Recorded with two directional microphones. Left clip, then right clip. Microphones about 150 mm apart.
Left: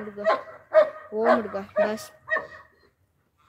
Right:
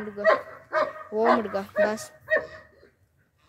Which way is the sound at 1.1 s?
15° left (ahead or behind).